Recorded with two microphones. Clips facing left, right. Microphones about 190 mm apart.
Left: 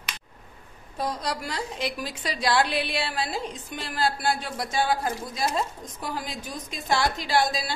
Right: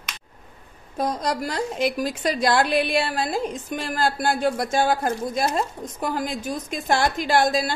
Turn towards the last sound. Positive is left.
turn(degrees=-50)  # may be behind; listen again after turning